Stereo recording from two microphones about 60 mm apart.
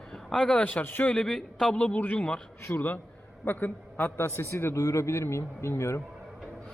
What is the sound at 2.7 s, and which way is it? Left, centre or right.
A man's voice, left.